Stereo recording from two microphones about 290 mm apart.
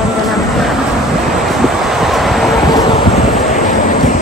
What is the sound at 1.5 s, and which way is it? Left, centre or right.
Vehicle, centre.